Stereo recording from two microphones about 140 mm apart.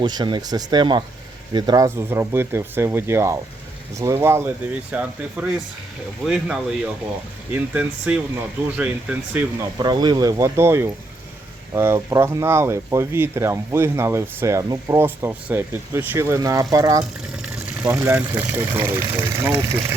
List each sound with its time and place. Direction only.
0.0 s speech: 30° right (ahead or behind); by 9.4 s 10° right (ahead or behind)
9.7 s speech: 30° right (ahead or behind)
17.0 s a sound: 10° right (ahead or behind)
17.8 s speech: 15° right (ahead or behind)